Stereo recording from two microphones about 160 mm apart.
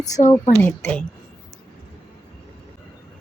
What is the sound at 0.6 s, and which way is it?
Speech, 10° left (ahead or behind).